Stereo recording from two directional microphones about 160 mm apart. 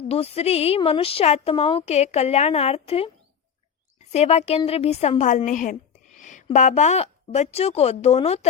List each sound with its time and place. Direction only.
0.1 s a woman's voice: 40° left (ahead or behind)
4.1 s a woman's voice: 40° left (ahead or behind)